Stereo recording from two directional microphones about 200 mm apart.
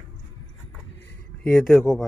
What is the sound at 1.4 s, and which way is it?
Speech, 5° left (ahead or behind).